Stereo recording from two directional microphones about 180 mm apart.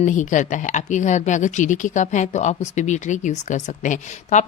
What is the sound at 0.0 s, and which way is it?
Speech, 45° left (ahead or behind).